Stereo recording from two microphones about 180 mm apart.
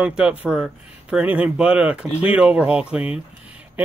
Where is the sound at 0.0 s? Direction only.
5° right (ahead or behind).